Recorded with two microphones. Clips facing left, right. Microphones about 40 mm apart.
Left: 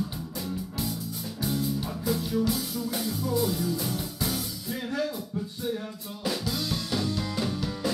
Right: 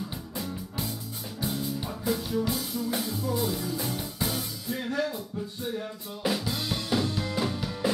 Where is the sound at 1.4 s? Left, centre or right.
Centre.